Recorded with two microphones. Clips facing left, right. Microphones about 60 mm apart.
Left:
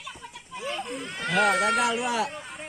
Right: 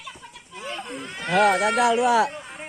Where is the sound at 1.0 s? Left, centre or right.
Centre.